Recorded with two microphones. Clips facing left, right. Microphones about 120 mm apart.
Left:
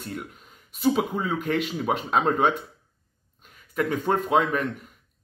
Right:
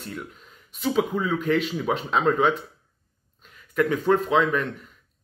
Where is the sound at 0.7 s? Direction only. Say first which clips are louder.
Even; 40° left (ahead or behind).